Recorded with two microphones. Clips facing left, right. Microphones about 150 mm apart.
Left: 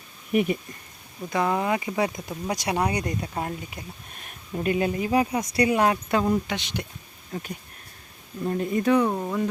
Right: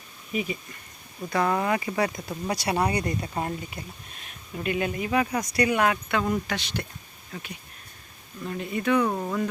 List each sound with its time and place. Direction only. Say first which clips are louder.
0.3 s speech: left 7 dB; 65° left (ahead or behind)
1.3 s speech: even; 15° left (ahead or behind)
3.3 s speech: even; centre (ahead or behind)
4.5 s speech: left 3 dB; 35° left (ahead or behind)
7.3 s speech: left 5 dB; 40° left (ahead or behind)
9.0 s speech: left 1 dB; 5° left (ahead or behind)